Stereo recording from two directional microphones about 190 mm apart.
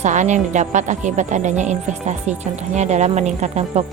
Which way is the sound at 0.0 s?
40° right (ahead or behind).